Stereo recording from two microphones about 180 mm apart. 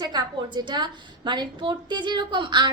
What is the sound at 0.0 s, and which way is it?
A woman's voice, 25° right (ahead or behind).